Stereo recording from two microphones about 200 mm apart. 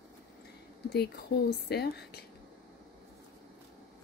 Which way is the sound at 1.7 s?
55° left (ahead or behind).